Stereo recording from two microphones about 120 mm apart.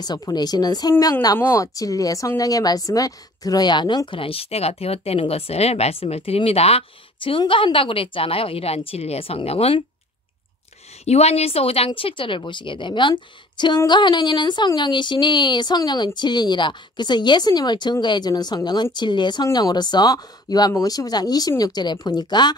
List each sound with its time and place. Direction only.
0.0 s speech: 35° left (ahead or behind); by 6.8 s 55° left (ahead or behind)
7.2 s speech: 45° left (ahead or behind)
11.1 s speech: 60° left (ahead or behind); by 22.6 s 35° left (ahead or behind)